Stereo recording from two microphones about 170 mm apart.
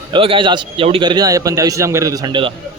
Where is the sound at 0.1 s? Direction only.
30° right (ahead or behind).